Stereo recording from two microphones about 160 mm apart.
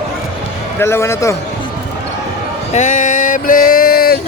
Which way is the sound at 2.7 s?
50° left (ahead or behind).